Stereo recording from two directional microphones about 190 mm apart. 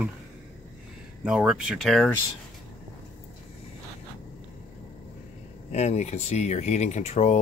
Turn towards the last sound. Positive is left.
turn(degrees=35)  # may be behind; listen again after turning